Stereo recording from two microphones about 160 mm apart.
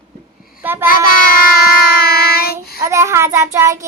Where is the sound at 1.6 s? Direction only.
70° left (ahead or behind).